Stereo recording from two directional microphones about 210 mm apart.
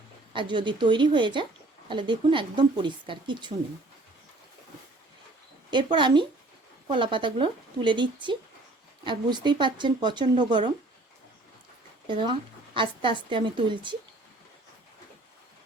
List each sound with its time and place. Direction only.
0.3 s a woman's voice: 20° right (ahead or behind)
5.7 s a woman's voice: 20° right (ahead or behind)
12.0 s a woman's voice: 25° right (ahead or behind)